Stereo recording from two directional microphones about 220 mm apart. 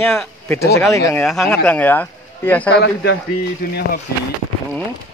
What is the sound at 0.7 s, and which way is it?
Speech, 15° left (ahead or behind).